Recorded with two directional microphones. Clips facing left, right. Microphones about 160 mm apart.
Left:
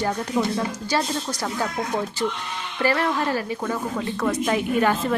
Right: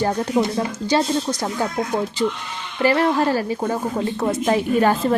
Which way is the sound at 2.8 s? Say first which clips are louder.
Right 5 dB; 25° right (ahead or behind).